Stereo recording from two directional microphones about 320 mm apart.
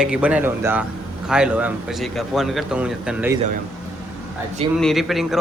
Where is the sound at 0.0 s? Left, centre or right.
Centre.